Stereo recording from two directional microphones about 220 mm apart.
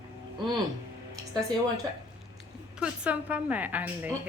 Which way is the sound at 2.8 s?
5° right (ahead or behind).